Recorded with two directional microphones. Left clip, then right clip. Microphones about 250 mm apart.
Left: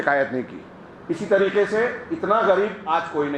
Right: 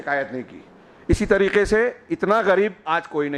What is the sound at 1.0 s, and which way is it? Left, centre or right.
A man's voice, right.